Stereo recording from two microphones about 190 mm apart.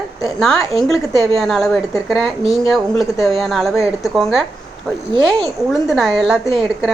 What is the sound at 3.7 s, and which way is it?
Speech, 15° left (ahead or behind).